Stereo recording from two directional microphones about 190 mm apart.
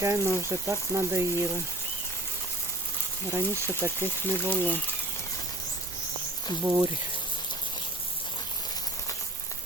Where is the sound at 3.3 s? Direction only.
10° right (ahead or behind).